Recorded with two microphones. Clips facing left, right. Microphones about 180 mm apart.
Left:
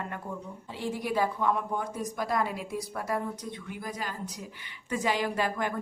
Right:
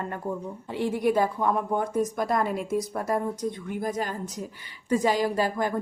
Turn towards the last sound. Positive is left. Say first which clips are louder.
# right 4 dB
turn(degrees=-35)  # may be behind; listen again after turning